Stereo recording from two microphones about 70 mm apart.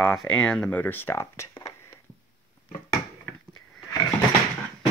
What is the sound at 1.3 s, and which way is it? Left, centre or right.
Speech, left.